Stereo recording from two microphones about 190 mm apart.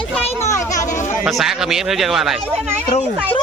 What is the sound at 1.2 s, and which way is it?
A man's voice, centre (ahead or behind).